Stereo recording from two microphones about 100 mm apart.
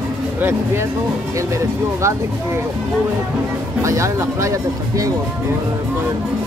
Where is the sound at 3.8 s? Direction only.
30° right (ahead or behind).